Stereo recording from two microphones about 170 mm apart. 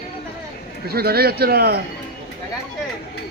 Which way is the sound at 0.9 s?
65° right (ahead or behind).